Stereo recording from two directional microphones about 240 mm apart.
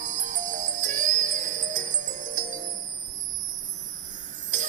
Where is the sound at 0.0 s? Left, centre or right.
Right.